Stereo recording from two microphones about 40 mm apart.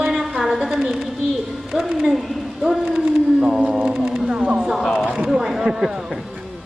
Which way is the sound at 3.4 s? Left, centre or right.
Centre.